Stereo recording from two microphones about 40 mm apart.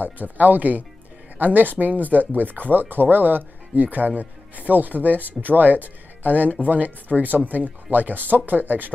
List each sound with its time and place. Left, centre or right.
0.0 s speech: right